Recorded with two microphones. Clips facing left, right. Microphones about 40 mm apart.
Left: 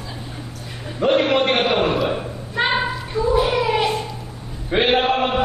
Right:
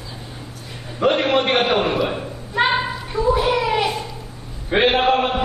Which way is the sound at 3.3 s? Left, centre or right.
Centre.